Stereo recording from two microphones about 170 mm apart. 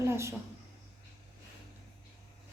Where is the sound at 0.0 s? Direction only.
15° right (ahead or behind).